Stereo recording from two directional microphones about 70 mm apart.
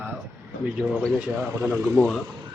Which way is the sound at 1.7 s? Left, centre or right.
Centre.